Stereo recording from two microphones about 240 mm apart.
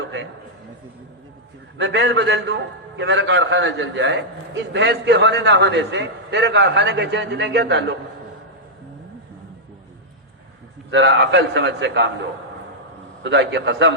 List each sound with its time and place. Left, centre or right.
1.8 s a man's voice: right
10.9 s a man's voice: right
13.2 s a man's voice: right